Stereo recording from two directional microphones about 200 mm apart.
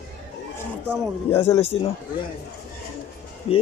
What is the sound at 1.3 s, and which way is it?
Speech, 30° left (ahead or behind).